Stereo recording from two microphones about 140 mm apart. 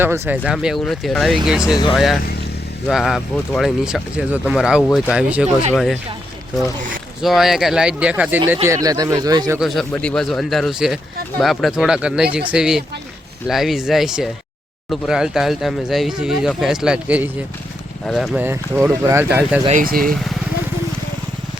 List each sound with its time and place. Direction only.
0.0 s speech: 15° right (ahead or behind)
0.5 s speech: centre (ahead or behind)
1.7 s speech: 35° left (ahead or behind)
2.8 s speech: centre (ahead or behind)
7.2 s speech: centre (ahead or behind)
8.6 s speech: 25° right (ahead or behind)
9.6 s speech: centre (ahead or behind)
18.0 s speech: centre (ahead or behind)
18.3 s speech: 15° right (ahead or behind)
19.7 s speech: 90° right